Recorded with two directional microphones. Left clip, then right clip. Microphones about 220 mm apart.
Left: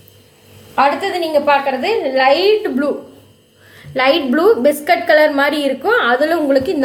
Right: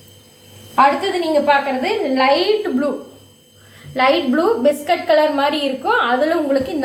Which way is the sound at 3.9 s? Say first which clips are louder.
Left 2 dB; 50° left (ahead or behind).